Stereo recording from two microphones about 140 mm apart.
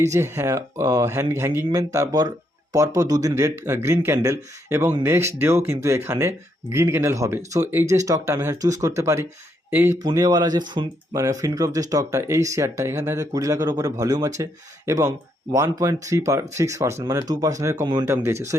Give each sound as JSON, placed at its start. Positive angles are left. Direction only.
{"t": 0.1, "sound": "speech", "side_deg": -20}
{"t": 10.0, "sound": "speech", "side_deg": -25}